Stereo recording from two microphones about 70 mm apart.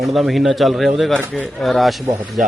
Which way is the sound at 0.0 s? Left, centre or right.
Centre.